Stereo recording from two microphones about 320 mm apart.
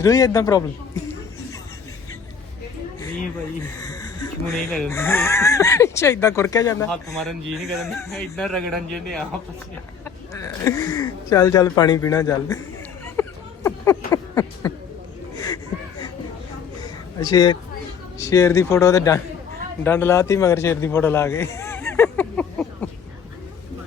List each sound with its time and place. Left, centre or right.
0.0 s speech: centre
4.5 s speech: centre
10.3 s speech: centre
13.1 s a sound: centre
18.2 s a man's voice: centre